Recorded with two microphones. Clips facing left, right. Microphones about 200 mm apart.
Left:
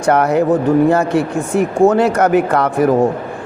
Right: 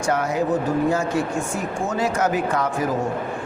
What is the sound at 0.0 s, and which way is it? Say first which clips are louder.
Speech: left 8 dB; 65° left (ahead or behind).